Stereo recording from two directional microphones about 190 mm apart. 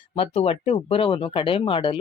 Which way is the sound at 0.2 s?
30° left (ahead or behind).